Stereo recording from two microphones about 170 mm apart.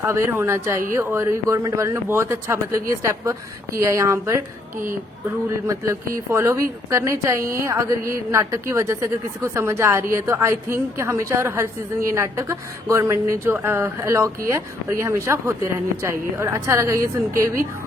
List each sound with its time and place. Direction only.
0.0 s a woman's voice: 15° right (ahead or behind)
5.5 s a woman's voice: 15° right (ahead or behind)